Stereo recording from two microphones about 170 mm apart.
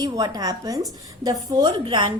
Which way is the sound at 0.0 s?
20° right (ahead or behind).